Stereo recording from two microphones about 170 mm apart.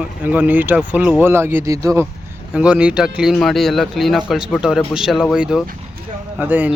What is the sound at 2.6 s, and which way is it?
Speech, 5° right (ahead or behind).